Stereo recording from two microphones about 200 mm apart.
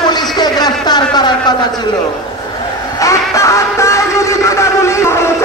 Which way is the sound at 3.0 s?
15° left (ahead or behind).